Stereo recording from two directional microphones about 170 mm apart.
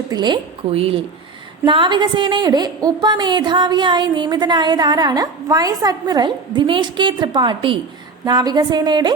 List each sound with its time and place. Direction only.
0.1 s a woman's voice: 25° right (ahead or behind)